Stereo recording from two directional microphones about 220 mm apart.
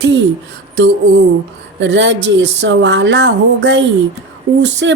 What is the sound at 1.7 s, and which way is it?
Speech, 55° right (ahead or behind).